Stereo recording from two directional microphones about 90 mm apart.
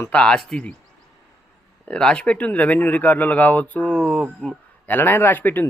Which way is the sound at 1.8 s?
10° left (ahead or behind).